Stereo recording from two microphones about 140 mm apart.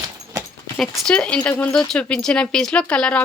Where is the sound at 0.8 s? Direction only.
5° left (ahead or behind).